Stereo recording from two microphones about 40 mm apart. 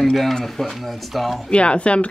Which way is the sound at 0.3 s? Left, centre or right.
Centre.